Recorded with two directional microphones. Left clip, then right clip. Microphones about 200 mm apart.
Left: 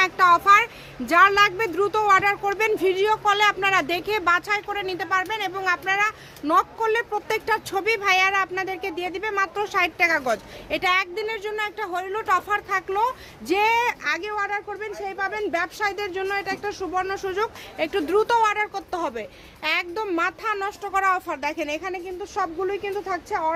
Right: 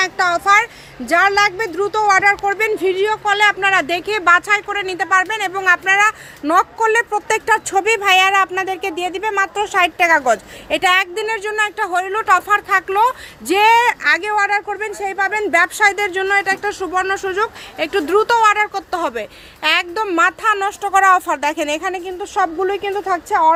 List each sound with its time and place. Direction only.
0.0 s a woman's voice: 10° right (ahead or behind); by 23.5 s 35° right (ahead or behind)